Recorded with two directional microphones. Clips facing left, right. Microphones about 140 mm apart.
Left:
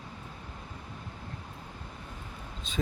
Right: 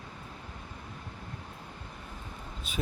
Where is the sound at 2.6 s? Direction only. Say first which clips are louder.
Left 2 dB; 10° right (ahead or behind).